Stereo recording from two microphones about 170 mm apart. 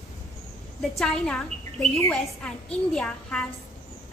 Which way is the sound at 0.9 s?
5° left (ahead or behind).